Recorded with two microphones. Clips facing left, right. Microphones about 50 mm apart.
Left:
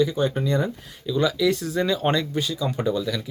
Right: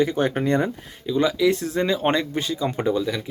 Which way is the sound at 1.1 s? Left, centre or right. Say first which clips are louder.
Right 2 dB; right.